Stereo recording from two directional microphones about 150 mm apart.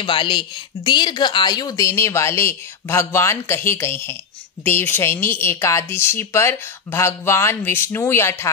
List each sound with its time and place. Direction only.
0.0 s a woman's voice: 30° left (ahead or behind); by 8.5 s 15° left (ahead or behind)